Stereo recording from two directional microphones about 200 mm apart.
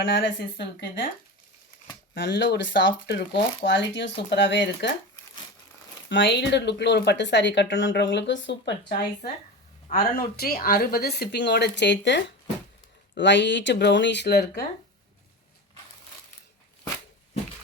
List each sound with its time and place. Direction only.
0.0 s speech: 65° left (ahead or behind)
2.1 s speech: 60° left (ahead or behind)
3.2 s speech: 45° left (ahead or behind)
3.7 s speech: 65° left (ahead or behind)
6.1 s speech: 60° left (ahead or behind)